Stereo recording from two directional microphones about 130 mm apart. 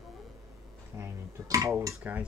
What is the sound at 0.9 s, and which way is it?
Dishes, 25° right (ahead or behind).